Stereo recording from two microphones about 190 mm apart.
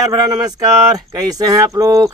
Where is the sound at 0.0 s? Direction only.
15° right (ahead or behind).